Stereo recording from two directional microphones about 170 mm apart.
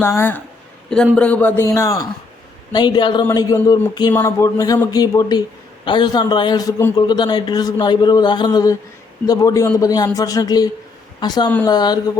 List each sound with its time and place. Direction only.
0.0 s a man's voice: 15° left (ahead or behind)